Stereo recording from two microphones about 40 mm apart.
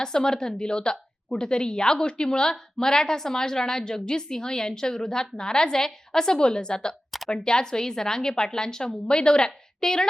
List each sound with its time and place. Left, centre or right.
0.0 s a woman's voice: centre